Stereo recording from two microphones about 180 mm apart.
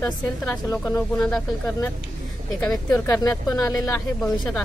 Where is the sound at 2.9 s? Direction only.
15° left (ahead or behind).